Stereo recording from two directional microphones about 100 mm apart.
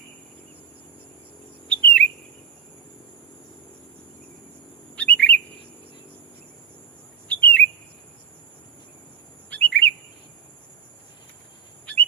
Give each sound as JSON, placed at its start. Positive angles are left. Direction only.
{"t": 1.6, "sound": "chirp", "side_deg": 15}
{"t": 4.9, "sound": "chirp", "side_deg": 15}
{"t": 7.3, "sound": "bird", "side_deg": 15}
{"t": 9.5, "sound": "chirp", "side_deg": 15}